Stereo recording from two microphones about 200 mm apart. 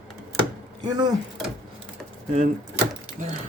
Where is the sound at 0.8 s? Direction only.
20° right (ahead or behind).